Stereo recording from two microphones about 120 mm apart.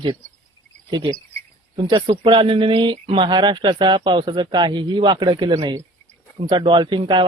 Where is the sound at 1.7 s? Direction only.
40° right (ahead or behind).